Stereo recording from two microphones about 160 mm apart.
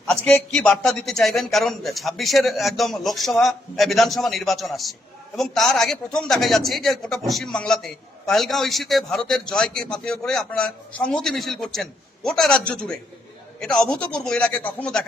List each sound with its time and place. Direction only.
0.1 s a man's voice: 5° left (ahead or behind)